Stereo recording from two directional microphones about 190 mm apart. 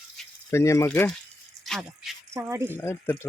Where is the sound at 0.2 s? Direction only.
Centre (ahead or behind).